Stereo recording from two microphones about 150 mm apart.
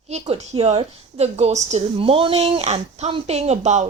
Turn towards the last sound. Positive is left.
turn(degrees=-50)  # may be behind; listen again after turning